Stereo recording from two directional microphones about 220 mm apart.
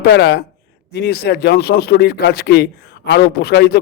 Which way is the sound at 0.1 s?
50° left (ahead or behind).